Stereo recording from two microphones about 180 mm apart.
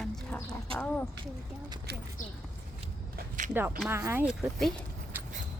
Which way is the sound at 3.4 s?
45° right (ahead or behind).